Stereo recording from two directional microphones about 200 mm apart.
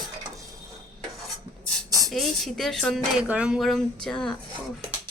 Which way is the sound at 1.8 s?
15° right (ahead or behind).